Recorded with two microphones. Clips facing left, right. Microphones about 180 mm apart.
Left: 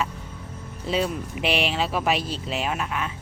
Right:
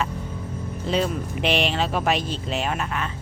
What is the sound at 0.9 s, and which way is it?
Speech, 5° left (ahead or behind).